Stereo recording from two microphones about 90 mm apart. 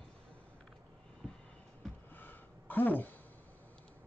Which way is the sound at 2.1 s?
20° left (ahead or behind).